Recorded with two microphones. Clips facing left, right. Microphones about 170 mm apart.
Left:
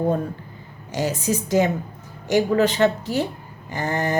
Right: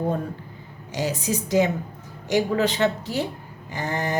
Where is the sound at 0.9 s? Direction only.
50° left (ahead or behind).